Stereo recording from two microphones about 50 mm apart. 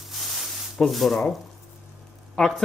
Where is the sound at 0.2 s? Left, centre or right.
Centre.